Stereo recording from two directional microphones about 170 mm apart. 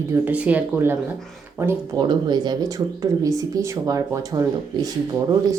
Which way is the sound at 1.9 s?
25° right (ahead or behind).